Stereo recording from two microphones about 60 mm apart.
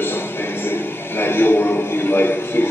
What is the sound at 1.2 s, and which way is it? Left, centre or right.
A man's voice, left.